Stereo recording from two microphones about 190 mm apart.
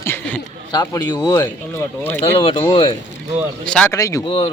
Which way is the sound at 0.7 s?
20° left (ahead or behind).